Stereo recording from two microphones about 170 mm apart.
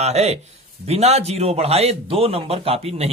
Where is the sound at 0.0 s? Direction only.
40° right (ahead or behind).